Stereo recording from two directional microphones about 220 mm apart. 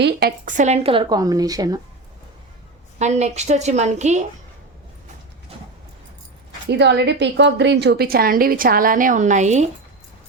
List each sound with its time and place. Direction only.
0.0 s speech: 45° right (ahead or behind); by 1.8 s 15° right (ahead or behind)
3.0 s a woman's voice: 30° right (ahead or behind)
6.7 s a woman's voice: 50° right (ahead or behind); by 9.6 s 30° right (ahead or behind)